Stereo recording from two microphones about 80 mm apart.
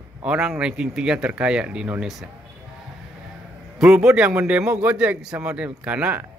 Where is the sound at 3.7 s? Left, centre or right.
Centre.